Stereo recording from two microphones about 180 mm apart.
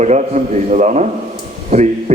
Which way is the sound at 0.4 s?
45° right (ahead or behind).